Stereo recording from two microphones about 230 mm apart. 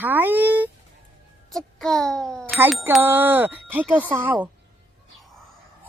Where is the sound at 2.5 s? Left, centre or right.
Centre.